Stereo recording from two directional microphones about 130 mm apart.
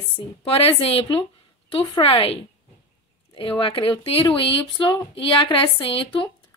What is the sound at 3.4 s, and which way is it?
A woman's voice, 40° left (ahead or behind).